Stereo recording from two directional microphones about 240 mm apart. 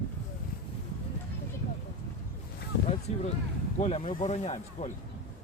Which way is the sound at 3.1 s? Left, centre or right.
Left.